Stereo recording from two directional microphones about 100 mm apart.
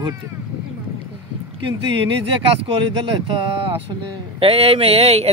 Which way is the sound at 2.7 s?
55° right (ahead or behind).